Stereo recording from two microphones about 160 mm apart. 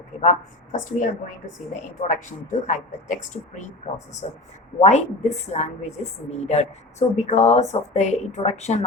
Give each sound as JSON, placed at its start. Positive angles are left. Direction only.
{"t": 0.2, "sound": "a woman's voice", "side_deg": 50}